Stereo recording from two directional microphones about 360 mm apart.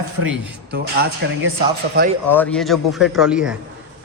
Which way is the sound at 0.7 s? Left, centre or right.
Right.